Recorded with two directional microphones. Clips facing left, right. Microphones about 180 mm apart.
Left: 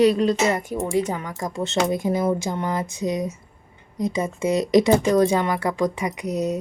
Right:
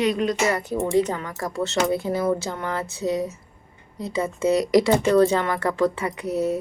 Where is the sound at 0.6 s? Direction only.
15° left (ahead or behind).